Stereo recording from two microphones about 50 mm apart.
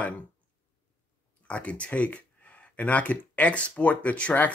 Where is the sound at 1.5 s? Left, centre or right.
Left.